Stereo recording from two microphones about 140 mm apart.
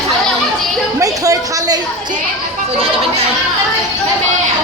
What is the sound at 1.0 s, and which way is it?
Speech, 25° right (ahead or behind).